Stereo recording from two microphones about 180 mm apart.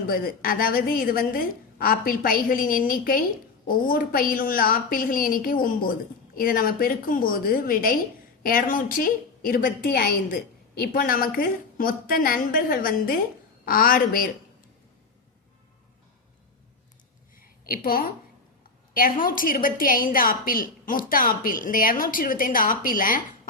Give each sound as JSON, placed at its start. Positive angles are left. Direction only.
{"t": 0.1, "sound": "a woman's voice", "side_deg": 55}
{"t": 17.3, "sound": "a sound", "side_deg": 55}
{"t": 18.9, "sound": "a woman's voice", "side_deg": 50}